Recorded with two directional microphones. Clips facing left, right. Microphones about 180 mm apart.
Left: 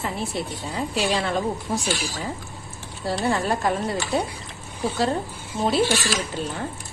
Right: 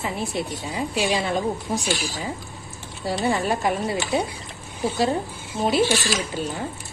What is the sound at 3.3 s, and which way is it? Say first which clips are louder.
Speech: even; 20° right (ahead or behind).